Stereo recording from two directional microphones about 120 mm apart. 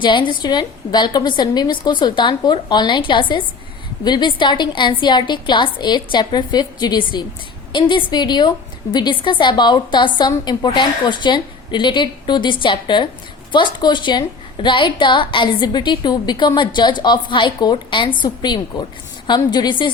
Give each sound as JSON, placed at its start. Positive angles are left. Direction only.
{"t": 0.0, "sound": "a woman's voice", "side_deg": 40}